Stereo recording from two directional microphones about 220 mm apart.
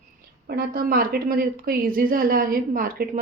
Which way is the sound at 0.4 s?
40° right (ahead or behind).